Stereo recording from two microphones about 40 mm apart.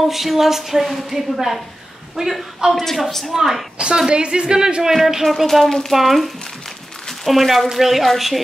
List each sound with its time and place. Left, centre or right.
0.1 s speech: centre
3.3 s a woman's voice: centre
3.7 s a woman's voice: right
4.9 s speech: centre